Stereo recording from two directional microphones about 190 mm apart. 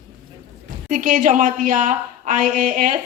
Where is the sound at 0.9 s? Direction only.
45° right (ahead or behind).